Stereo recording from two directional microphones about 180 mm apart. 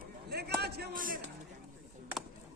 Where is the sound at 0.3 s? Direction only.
60° right (ahead or behind).